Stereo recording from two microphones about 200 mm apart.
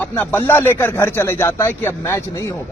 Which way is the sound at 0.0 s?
10° left (ahead or behind).